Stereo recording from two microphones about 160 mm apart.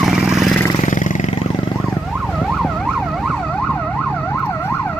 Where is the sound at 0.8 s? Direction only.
50° left (ahead or behind).